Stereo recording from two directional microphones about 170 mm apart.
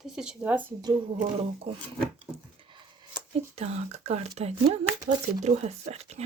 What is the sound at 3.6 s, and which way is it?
Speech, 40° right (ahead or behind).